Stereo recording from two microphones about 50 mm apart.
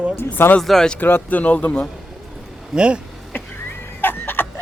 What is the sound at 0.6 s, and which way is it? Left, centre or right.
Speech, centre.